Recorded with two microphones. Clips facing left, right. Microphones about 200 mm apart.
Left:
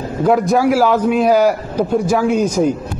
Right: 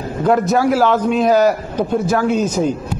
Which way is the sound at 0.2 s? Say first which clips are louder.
Left 1 dB; 5° left (ahead or behind).